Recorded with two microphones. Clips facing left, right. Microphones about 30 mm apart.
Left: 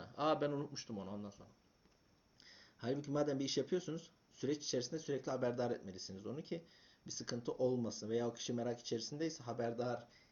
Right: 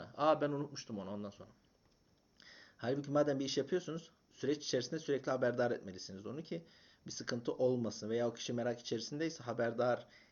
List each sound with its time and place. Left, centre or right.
0.0 s speech: centre
0.9 s speech: centre
1.2 s a man's voice: right
2.4 s speech: centre; by 10.2 s right